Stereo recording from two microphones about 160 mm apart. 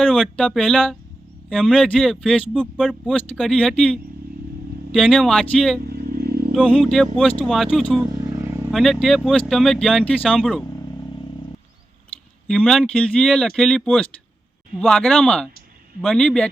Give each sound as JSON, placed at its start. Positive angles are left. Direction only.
{"t": 0.0, "sound": "speech", "side_deg": 5}
{"t": 4.9, "sound": "speech", "side_deg": 0}
{"t": 5.9, "sound": "vehicle", "side_deg": -75}
{"t": 6.7, "sound": "speech", "side_deg": 5}
{"t": 8.3, "sound": "vehicle", "side_deg": -20}
{"t": 8.7, "sound": "speech", "side_deg": 0}
{"t": 12.5, "sound": "speech", "side_deg": 5}